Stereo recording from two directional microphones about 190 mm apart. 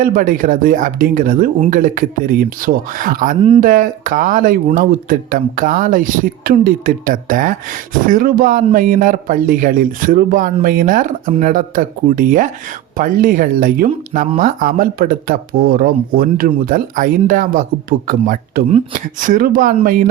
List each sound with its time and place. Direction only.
0.0 s speech: 45° right (ahead or behind)